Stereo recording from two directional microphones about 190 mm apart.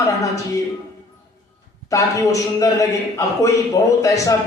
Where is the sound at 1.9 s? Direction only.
15° left (ahead or behind).